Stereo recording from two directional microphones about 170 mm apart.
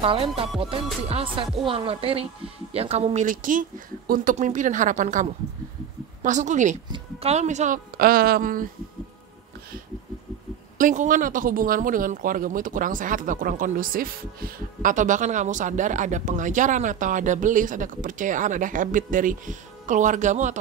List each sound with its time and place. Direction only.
0.0 s music: 35° right (ahead or behind)
3.3 s speech: 50° right (ahead or behind)
10.8 s speech: 50° right (ahead or behind)